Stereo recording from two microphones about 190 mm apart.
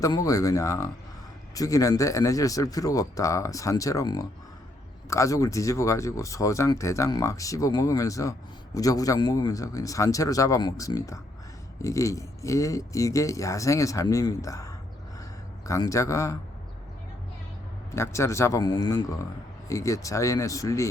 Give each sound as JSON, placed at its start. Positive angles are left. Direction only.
{"t": 0.0, "sound": "speech", "side_deg": 20}
{"t": 17.9, "sound": "speech", "side_deg": 15}